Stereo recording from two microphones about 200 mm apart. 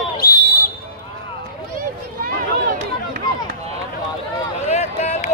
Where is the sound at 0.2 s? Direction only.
45° left (ahead or behind).